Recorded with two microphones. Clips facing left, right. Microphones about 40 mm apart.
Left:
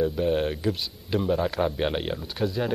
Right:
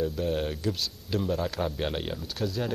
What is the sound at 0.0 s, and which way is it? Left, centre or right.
A man's voice, centre.